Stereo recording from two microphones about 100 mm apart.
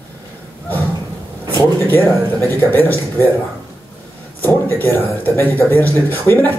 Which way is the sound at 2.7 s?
20° left (ahead or behind).